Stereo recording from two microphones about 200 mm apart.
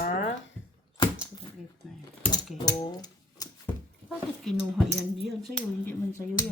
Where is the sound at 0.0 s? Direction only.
40° left (ahead or behind).